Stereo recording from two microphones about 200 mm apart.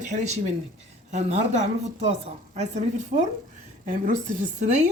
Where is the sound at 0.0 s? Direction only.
40° right (ahead or behind).